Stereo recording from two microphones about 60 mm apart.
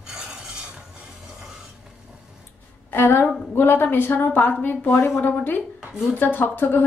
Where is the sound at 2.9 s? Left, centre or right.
Left.